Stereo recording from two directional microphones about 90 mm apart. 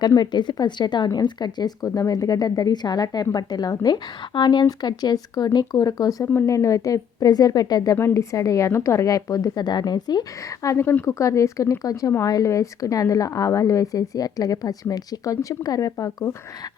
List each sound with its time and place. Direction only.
0.2 s a woman's voice: 55° left (ahead or behind)
7.9 s a woman's voice: 30° left (ahead or behind); by 10.2 s 50° left (ahead or behind)
10.6 s a woman's voice: 35° left (ahead or behind)